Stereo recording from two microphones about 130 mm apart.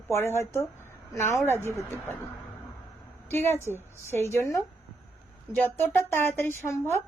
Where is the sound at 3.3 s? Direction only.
20° left (ahead or behind).